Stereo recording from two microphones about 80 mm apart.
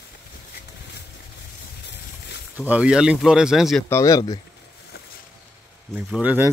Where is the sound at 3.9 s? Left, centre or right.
Left.